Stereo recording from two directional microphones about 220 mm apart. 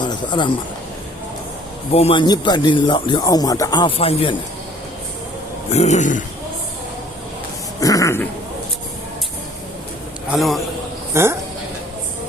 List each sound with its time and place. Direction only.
0.0 s speech: 20° left (ahead or behind)
1.9 s speech: 25° left (ahead or behind)
5.7 s speech: 30° left (ahead or behind)
7.8 s a sound: 15° left (ahead or behind)
10.2 s a man's voice: centre (ahead or behind)
11.1 s a woman's voice: 10° right (ahead or behind)